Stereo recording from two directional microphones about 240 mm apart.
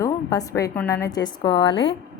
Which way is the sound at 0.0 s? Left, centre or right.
Centre.